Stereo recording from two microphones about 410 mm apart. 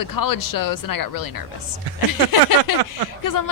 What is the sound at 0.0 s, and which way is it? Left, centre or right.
A woman's voice, left.